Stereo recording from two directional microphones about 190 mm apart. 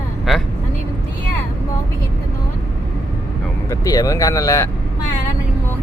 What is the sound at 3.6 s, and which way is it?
Speech, 20° left (ahead or behind).